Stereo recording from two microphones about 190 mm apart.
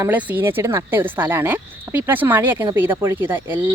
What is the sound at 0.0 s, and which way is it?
Speech, 10° right (ahead or behind).